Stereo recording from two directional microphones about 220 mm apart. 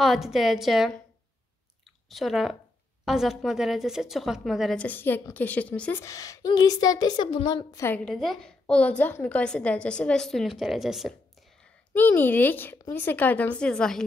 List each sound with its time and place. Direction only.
0.0 s a woman's voice: centre (ahead or behind)
2.0 s a woman's voice: centre (ahead or behind)